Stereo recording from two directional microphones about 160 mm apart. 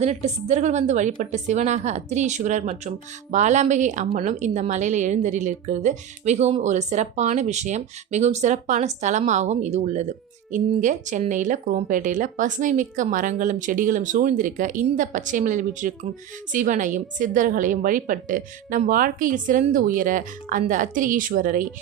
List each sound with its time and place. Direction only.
0.0 s a woman's voice: 45° right (ahead or behind)